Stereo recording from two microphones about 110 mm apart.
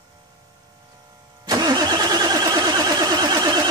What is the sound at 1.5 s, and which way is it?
Vehicle, 40° right (ahead or behind).